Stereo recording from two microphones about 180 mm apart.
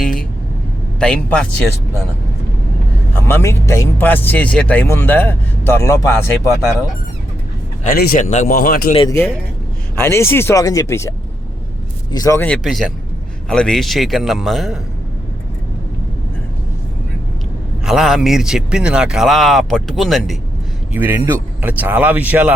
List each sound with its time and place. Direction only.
0.0 s vehicle: centre (ahead or behind)
0.9 s speech: 5° left (ahead or behind)
3.2 s speech: 15° left (ahead or behind)
7.9 s a man's voice: 55° left (ahead or behind)
8.2 s speech: 40° left (ahead or behind)
10.0 s speech: 15° left (ahead or behind)
12.1 s speech: 20° left (ahead or behind)
12.6 s speech: centre (ahead or behind)
17.8 s speech: centre (ahead or behind)
20.9 s speech: 10° right (ahead or behind)